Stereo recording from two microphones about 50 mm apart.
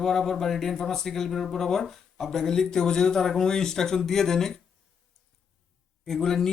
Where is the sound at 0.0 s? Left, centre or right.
Centre.